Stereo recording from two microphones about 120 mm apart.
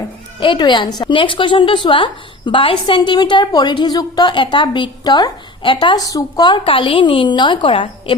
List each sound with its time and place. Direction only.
0.3 s a woman's voice: 45° left (ahead or behind)
1.1 s a woman's voice: 45° left (ahead or behind)
6.0 s a woman's voice: 30° left (ahead or behind); by 8.1 s 45° left (ahead or behind)